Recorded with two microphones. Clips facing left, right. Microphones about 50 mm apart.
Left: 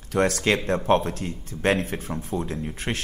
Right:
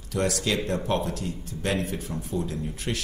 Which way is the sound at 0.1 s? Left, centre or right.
Left.